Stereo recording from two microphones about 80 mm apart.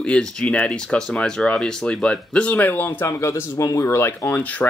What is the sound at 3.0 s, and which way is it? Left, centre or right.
Speech, left.